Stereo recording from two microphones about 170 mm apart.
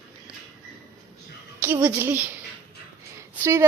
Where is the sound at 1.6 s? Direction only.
10° right (ahead or behind).